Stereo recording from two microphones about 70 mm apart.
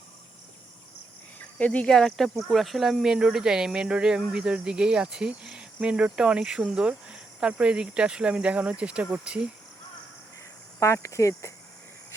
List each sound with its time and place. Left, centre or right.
1.5 s speech: centre
10.8 s speech: left